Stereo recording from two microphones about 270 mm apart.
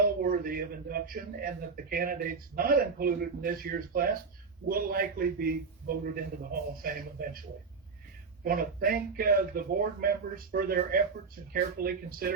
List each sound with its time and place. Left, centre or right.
0.0 s a man's voice: right
8.4 s a man's voice: right